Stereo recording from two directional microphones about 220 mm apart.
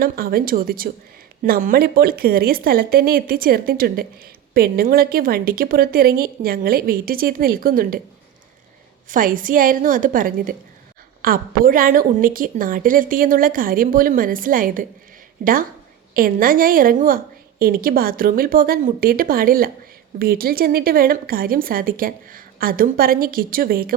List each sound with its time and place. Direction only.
0.0 s speech: 40° right (ahead or behind)
9.0 s speech: 40° right (ahead or behind)